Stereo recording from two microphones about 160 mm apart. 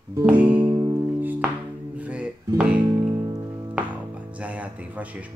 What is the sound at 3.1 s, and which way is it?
Music, 20° right (ahead or behind).